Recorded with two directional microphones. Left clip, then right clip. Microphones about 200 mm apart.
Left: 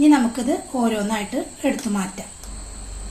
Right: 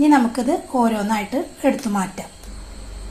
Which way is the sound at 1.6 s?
25° right (ahead or behind).